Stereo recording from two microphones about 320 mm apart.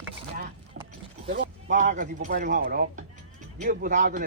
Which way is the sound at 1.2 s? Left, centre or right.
Right.